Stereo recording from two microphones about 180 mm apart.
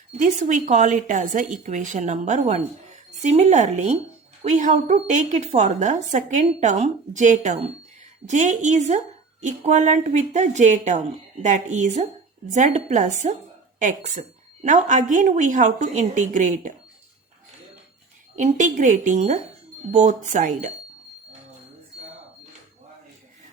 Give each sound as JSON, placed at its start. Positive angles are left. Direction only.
{"t": 0.2, "sound": "a woman's voice", "side_deg": -45}
{"t": 18.3, "sound": "a woman's voice", "side_deg": -45}